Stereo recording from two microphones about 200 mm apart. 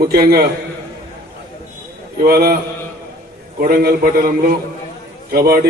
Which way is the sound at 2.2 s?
50° right (ahead or behind).